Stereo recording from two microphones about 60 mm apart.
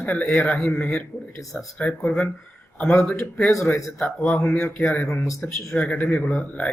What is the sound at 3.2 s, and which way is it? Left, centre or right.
A man's voice, centre.